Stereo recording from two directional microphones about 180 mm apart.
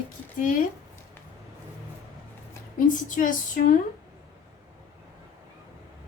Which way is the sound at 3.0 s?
45° left (ahead or behind).